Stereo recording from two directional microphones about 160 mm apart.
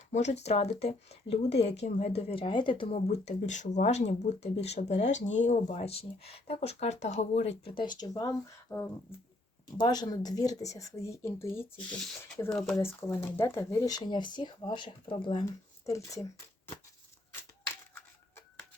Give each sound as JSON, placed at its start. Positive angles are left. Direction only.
{"t": 0.1, "sound": "speech", "side_deg": 45}
{"t": 7.9, "sound": "speech", "side_deg": 25}
{"t": 11.5, "sound": "speech", "side_deg": 5}
{"t": 12.8, "sound": "speech", "side_deg": 15}
{"t": 15.9, "sound": "speech", "side_deg": 20}